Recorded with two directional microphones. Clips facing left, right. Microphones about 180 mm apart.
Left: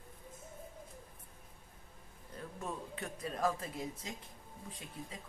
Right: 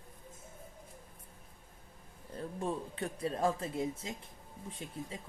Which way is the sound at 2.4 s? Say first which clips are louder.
Right 6 dB; 30° right (ahead or behind).